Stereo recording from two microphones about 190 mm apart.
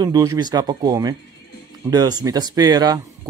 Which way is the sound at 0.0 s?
20° right (ahead or behind).